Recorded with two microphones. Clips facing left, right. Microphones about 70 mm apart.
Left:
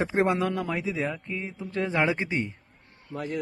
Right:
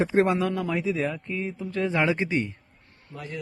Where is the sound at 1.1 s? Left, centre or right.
Centre.